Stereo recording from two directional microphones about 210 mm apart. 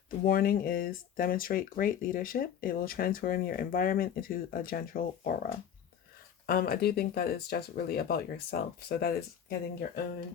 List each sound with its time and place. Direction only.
0.3 s speech: 45° left (ahead or behind)